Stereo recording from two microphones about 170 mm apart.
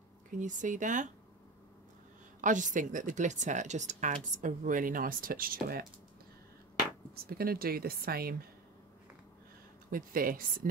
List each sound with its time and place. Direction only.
0.3 s a woman's voice: 50° right (ahead or behind)
2.4 s a woman's voice: 50° right (ahead or behind)
7.2 s speech: 65° right (ahead or behind)
9.8 s speech: 55° right (ahead or behind)